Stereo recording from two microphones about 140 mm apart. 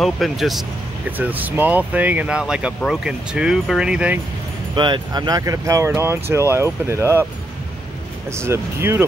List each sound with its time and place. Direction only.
0.0 s speech: centre (ahead or behind)
1.1 s speech: 10° right (ahead or behind)
4.7 s speech: 35° right (ahead or behind)
8.3 s speech: 20° right (ahead or behind)